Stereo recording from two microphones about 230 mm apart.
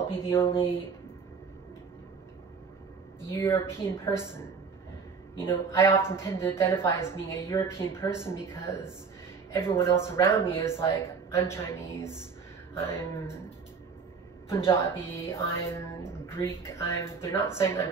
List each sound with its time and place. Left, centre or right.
0.5 s speech: left
3.3 s speech: centre
5.4 s speech: centre
14.7 s speech: centre